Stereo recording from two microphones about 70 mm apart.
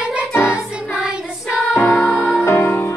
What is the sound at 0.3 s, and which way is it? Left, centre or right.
Music, left.